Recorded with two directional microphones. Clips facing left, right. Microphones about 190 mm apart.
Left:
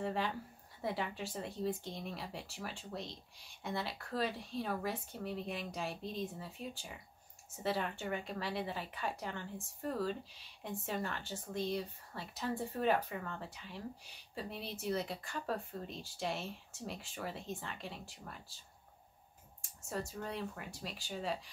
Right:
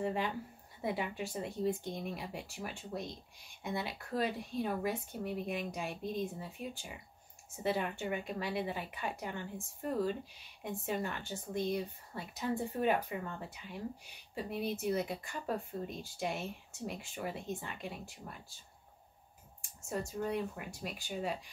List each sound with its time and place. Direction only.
0.0 s a woman's voice: 15° right (ahead or behind)
19.9 s a woman's voice: 15° right (ahead or behind)